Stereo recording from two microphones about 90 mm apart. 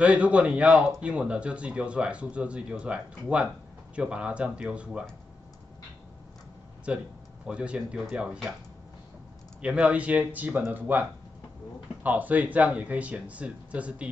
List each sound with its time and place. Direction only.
0.0 s speech: 15° right (ahead or behind)
6.9 s speech: 15° right (ahead or behind)
9.6 s speech: 15° right (ahead or behind)